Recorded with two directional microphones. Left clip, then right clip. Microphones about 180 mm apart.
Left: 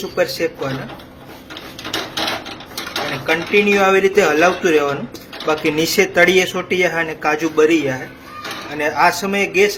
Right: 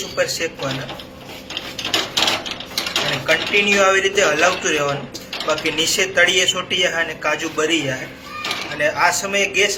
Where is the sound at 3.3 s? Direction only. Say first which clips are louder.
Left 2 dB; 50° left (ahead or behind).